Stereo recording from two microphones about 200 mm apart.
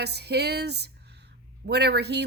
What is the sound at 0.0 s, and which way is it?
Speech, 55° right (ahead or behind).